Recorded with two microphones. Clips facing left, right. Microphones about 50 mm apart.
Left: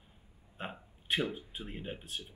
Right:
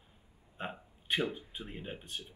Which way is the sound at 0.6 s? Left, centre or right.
Centre.